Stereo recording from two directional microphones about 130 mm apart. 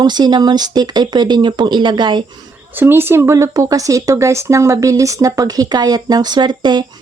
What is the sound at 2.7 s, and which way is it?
Speech, 15° right (ahead or behind).